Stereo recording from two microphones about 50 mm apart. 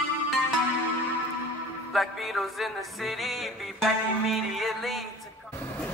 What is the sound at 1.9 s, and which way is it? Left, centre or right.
Music, centre.